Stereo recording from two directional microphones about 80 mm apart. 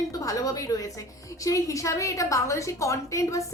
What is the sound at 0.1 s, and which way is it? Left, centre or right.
A woman's voice, left.